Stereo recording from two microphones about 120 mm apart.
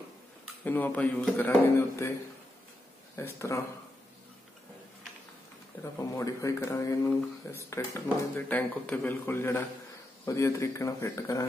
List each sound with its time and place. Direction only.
0.7 s a man's voice: 15° left (ahead or behind)
3.2 s a man's voice: 25° left (ahead or behind)
5.9 s a man's voice: 25° left (ahead or behind)